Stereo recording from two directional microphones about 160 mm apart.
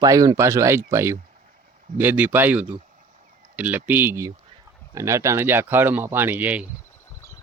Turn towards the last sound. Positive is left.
turn(degrees=-10)  # may be behind; listen again after turning